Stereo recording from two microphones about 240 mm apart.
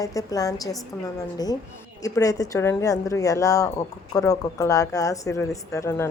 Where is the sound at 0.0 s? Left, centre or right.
Centre.